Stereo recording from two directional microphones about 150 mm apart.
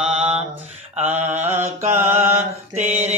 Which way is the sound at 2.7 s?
50° right (ahead or behind).